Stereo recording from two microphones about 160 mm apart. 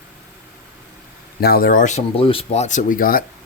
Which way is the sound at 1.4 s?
70° left (ahead or behind).